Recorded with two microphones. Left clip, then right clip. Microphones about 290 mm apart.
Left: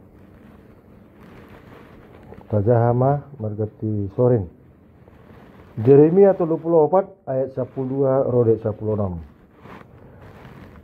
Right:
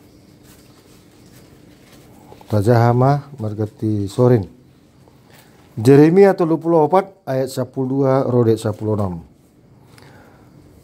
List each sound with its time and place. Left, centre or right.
2.5 s speech: right
5.8 s speech: right